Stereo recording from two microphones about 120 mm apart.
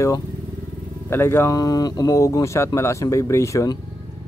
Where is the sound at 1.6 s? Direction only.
35° left (ahead or behind).